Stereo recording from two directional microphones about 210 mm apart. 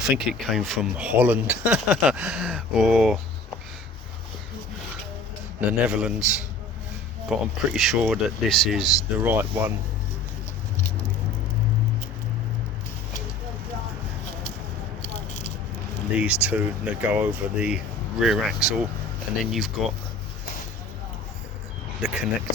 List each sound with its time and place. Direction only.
0.0 s speech: centre (ahead or behind)
5.5 s speech: 5° right (ahead or behind)
7.3 s speech: centre (ahead or behind)
15.3 s biting: 35° left (ahead or behind)
16.1 s speech: 5° right (ahead or behind)
22.0 s speech: centre (ahead or behind)